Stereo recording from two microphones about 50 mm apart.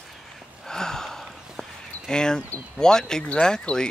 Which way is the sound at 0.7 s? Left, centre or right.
Centre.